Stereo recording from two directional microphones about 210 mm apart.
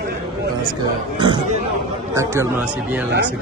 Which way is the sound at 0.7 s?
20° right (ahead or behind).